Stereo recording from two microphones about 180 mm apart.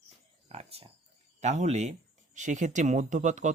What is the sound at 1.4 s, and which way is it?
Speech, 40° right (ahead or behind).